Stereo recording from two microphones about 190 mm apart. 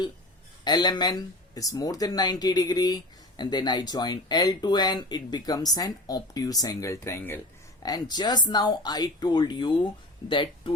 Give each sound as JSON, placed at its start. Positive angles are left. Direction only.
{"t": 0.6, "sound": "speech", "side_deg": 20}